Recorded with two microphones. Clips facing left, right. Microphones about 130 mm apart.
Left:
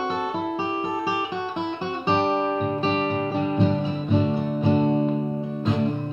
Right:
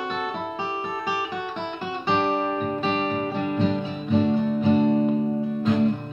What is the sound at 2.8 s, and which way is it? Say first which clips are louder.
Music: left 1 dB; 35° left (ahead or behind).